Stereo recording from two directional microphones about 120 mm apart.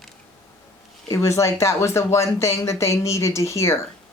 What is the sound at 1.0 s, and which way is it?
Speech, 25° left (ahead or behind).